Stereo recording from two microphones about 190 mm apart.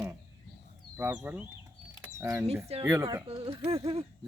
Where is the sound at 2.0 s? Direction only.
10° right (ahead or behind).